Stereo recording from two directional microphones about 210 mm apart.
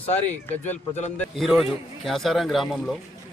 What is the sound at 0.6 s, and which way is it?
Speech, 35° left (ahead or behind).